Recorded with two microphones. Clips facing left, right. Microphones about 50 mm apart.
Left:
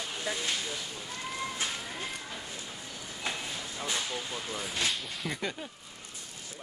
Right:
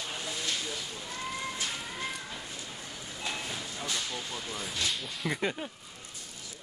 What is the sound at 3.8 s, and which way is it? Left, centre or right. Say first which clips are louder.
Speech: left 2 dB; left.